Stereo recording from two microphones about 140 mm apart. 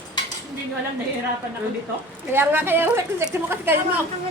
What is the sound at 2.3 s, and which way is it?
A woman's voice, 15° right (ahead or behind).